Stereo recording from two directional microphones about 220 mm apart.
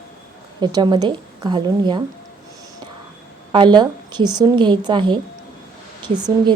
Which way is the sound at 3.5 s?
20° right (ahead or behind).